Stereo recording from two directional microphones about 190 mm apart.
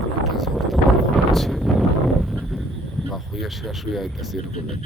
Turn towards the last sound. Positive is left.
turn(degrees=0)  # may be behind; listen again after turning